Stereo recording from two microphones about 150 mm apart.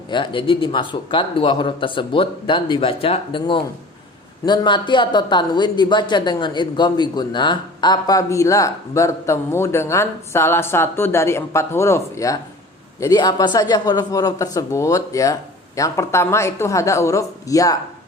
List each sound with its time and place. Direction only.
0.1 s a man's voice: 35° left (ahead or behind)